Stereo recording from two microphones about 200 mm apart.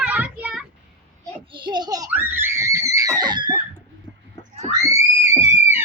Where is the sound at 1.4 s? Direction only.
25° right (ahead or behind).